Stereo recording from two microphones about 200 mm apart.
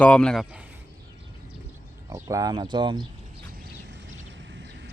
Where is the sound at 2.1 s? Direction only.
15° right (ahead or behind).